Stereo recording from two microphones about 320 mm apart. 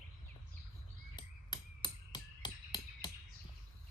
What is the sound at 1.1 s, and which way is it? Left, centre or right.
Hammer, centre.